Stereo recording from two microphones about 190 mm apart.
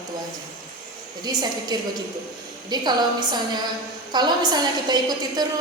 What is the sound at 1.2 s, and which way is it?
A woman's voice, 20° right (ahead or behind).